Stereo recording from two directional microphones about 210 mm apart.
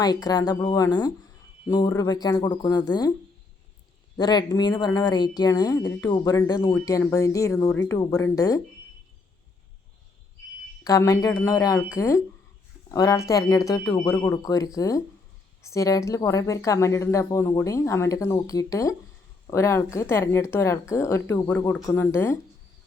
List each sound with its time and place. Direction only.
0.0 s speech: 20° left (ahead or behind)
4.2 s speech: 20° left (ahead or behind)
10.8 s speech: 15° left (ahead or behind)